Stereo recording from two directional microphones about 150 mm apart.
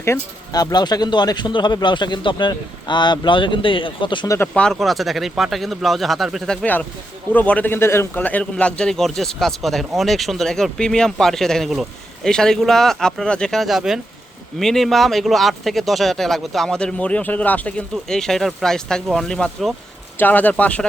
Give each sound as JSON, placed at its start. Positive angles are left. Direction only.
{"t": 0.0, "sound": "speech", "side_deg": 20}
{"t": 4.4, "sound": "a man's voice", "side_deg": 5}